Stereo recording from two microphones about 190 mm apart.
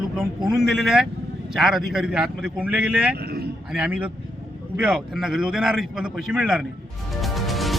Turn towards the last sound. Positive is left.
turn(degrees=0)  # may be behind; listen again after turning